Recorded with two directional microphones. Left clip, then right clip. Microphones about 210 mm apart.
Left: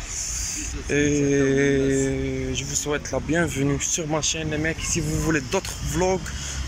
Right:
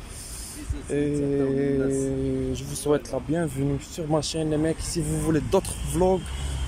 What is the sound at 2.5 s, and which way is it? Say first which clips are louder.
Speech: right 2 dB; 20° right (ahead or behind).